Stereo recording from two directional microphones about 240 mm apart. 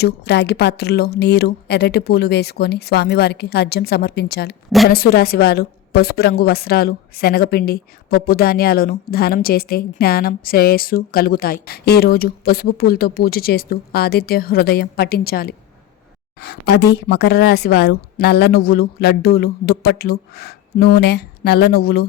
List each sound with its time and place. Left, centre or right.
0.0 s a woman's voice: left